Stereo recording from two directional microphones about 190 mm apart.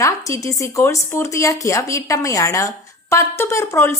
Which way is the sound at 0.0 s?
15° left (ahead or behind).